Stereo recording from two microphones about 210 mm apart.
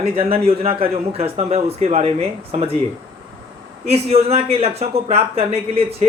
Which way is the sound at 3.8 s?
30° right (ahead or behind).